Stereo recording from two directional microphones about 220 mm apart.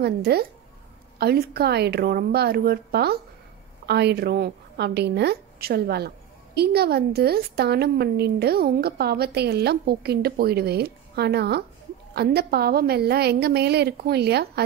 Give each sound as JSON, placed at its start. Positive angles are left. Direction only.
{"t": 0.0, "sound": "a woman's voice", "side_deg": -45}